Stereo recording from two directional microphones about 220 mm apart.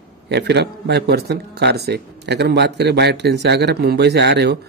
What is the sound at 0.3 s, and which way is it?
Speech, 50° right (ahead or behind).